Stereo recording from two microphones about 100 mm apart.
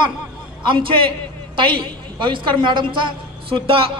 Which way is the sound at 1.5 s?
55° right (ahead or behind).